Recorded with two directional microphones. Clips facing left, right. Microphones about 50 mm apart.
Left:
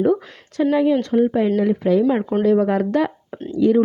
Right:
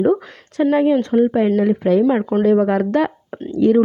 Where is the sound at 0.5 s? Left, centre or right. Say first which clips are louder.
Right 2 dB; right.